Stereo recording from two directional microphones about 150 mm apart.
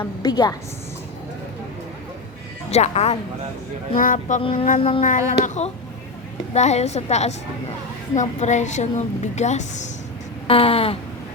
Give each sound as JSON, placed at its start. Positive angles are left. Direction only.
{"t": 0.0, "sound": "a woman's voice", "side_deg": 25}
{"t": 2.6, "sound": "a woman's voice", "side_deg": 45}
{"t": 3.9, "sound": "speech", "side_deg": 60}
{"t": 4.8, "sound": "a sound", "side_deg": 35}
{"t": 5.0, "sound": "a woman's voice", "side_deg": 50}
{"t": 10.4, "sound": "a sound", "side_deg": 40}